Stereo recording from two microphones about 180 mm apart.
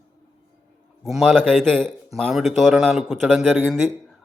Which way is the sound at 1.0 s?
Centre (ahead or behind).